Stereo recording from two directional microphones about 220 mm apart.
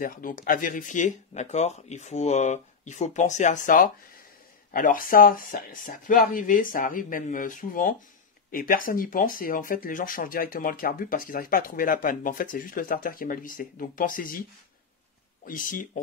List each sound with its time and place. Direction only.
0.0 s speech: 40° left (ahead or behind)
15.4 s speech: 40° left (ahead or behind)